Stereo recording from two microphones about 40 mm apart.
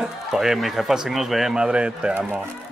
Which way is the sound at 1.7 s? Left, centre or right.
Right.